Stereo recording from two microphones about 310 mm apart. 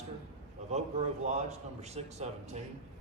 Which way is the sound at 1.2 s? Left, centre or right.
Right.